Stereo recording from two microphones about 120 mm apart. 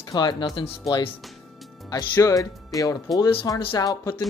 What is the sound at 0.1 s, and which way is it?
Speech, 40° left (ahead or behind).